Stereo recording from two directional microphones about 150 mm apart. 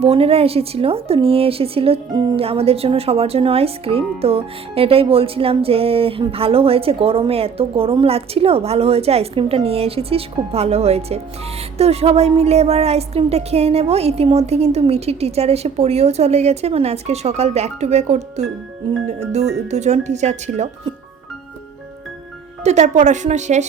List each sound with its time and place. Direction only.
0.0 s a woman's voice: 40° right (ahead or behind)
22.6 s speech: 50° right (ahead or behind)